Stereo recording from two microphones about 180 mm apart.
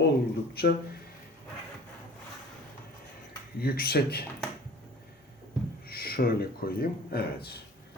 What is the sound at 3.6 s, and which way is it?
Speech, 60° left (ahead or behind).